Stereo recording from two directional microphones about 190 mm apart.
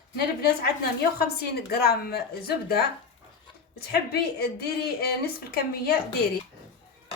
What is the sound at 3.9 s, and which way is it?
A woman's voice, 55° left (ahead or behind).